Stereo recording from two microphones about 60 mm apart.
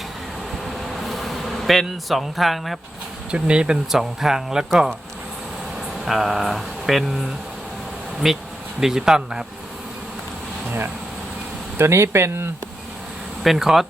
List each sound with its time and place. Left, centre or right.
0.6 s bee: centre
3.3 s speech: centre
6.1 s speech: centre
11.8 s speech: right
13.4 s speech: centre